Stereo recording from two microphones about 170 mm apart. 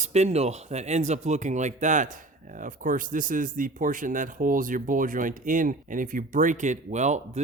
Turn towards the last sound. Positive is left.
turn(degrees=-45)  # may be behind; listen again after turning